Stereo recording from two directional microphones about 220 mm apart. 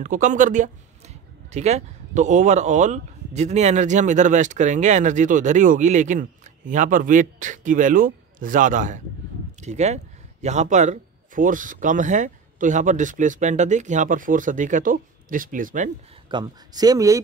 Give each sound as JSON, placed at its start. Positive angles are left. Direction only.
{"t": 0.0, "sound": "speech", "side_deg": -35}
{"t": 16.3, "sound": "speech", "side_deg": -20}